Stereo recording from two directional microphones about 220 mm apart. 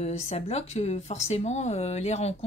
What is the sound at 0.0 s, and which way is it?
Speech, 30° left (ahead or behind).